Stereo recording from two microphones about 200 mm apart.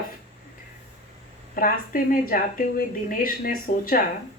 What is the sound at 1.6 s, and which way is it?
A woman's voice, 45° left (ahead or behind).